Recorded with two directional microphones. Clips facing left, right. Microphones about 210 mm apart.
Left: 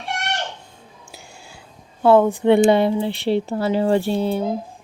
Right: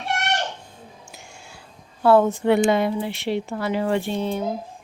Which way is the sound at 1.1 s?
35° left (ahead or behind).